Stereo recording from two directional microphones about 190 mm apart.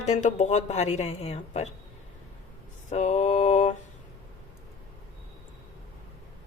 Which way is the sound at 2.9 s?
35° left (ahead or behind).